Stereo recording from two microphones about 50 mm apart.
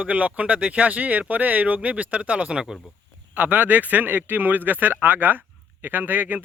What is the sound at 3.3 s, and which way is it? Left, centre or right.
Speech, right.